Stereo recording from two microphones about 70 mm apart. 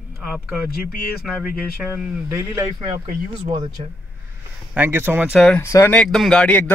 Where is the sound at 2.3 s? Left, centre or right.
Right.